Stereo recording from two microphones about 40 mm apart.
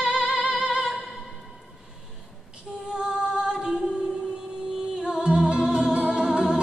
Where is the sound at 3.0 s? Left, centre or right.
Centre.